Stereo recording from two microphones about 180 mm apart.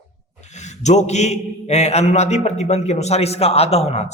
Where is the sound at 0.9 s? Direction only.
40° left (ahead or behind).